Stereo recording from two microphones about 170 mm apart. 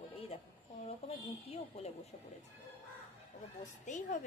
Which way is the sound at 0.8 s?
40° left (ahead or behind).